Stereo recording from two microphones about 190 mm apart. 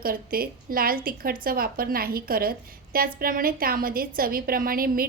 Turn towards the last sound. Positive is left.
turn(degrees=-50)  # may be behind; listen again after turning